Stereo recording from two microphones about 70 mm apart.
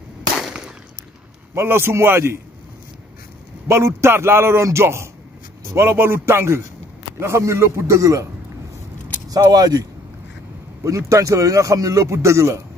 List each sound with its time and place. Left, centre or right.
0.5 s a sound: centre
1.5 s a man's voice: right
3.6 s a man's voice: right
9.3 s speech: right
10.8 s a man's voice: right